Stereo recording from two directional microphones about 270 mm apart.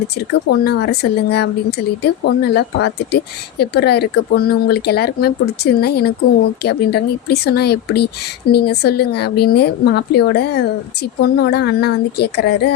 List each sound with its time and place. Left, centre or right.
0.6 s speech: left